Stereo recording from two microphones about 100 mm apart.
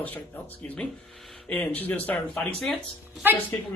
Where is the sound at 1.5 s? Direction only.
15° left (ahead or behind).